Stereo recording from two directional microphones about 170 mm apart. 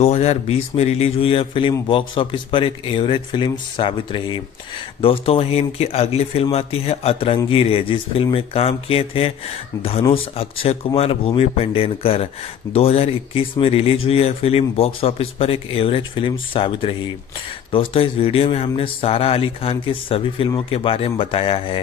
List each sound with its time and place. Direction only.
0.0 s a man's voice: 40° left (ahead or behind)